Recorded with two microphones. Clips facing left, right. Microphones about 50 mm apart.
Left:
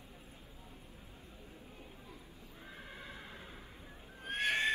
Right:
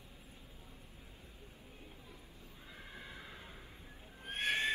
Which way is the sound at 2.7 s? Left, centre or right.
Left.